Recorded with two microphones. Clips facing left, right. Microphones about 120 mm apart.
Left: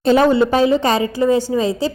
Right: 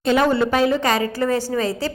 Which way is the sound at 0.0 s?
35° left (ahead or behind).